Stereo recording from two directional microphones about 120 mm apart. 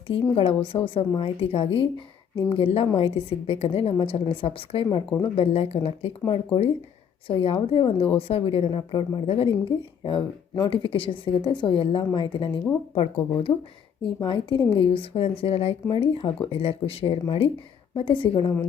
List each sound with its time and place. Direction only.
0.1 s speech: 50° left (ahead or behind)
6.2 s a woman's voice: 40° left (ahead or behind)
13.5 s a woman's voice: 35° left (ahead or behind)